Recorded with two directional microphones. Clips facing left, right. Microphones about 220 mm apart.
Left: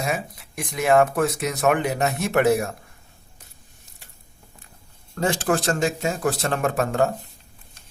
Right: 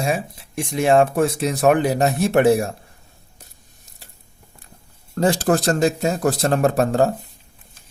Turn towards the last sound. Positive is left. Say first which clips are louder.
# right 5 dB
turn(degrees=-35)  # may be behind; listen again after turning